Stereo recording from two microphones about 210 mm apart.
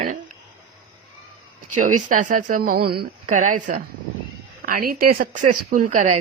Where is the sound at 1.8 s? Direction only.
35° right (ahead or behind).